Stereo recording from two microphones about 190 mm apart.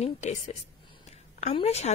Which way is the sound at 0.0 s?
35° left (ahead or behind).